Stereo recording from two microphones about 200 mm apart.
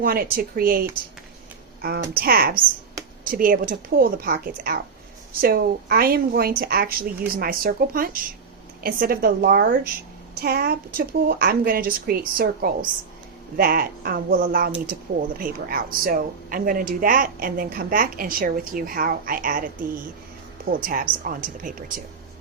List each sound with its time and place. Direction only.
0.0 s speech: 45° right (ahead or behind)